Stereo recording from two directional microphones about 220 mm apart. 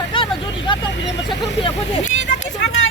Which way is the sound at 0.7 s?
20° left (ahead or behind).